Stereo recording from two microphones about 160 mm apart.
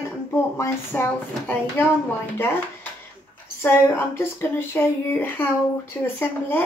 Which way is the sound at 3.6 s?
15° left (ahead or behind).